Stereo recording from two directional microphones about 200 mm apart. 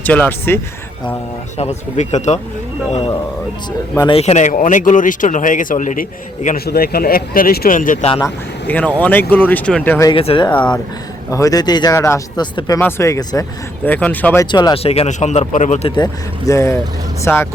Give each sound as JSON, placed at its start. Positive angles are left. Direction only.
{"t": 0.0, "sound": "speech", "side_deg": 10}
{"t": 1.5, "sound": "speech", "side_deg": 35}
{"t": 3.9, "sound": "speech", "side_deg": 20}
{"t": 4.2, "sound": "speech", "side_deg": 35}
{"t": 8.6, "sound": "speech", "side_deg": 5}
{"t": 10.1, "sound": "speech", "side_deg": 25}
{"t": 14.5, "sound": "speech", "side_deg": 20}
{"t": 16.5, "sound": "speech", "side_deg": 15}